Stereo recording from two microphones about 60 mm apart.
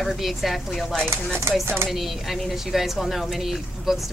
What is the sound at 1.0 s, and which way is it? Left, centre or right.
Speech, right.